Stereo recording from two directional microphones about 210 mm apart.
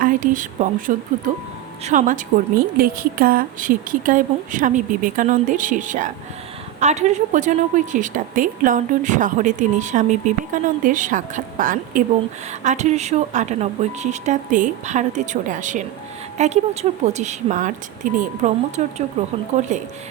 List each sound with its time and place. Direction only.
0.0 s a woman's voice: 40° right (ahead or behind)